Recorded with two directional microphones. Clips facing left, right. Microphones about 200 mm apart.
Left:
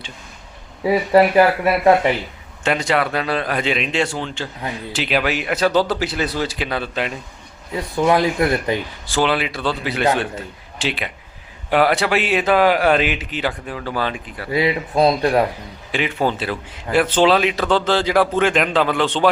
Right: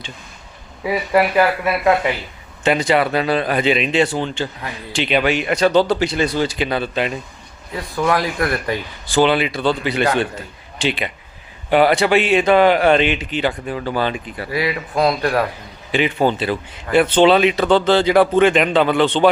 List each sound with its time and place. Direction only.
0.9 s speech: 30° left (ahead or behind)
2.6 s speech: centre (ahead or behind)
7.7 s speech: 20° left (ahead or behind)
9.0 s speech: centre (ahead or behind)
14.5 s speech: 25° left (ahead or behind)
15.9 s speech: centre (ahead or behind)